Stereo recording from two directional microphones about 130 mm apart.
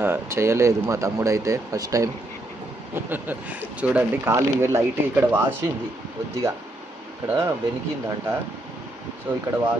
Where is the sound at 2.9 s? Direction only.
15° right (ahead or behind).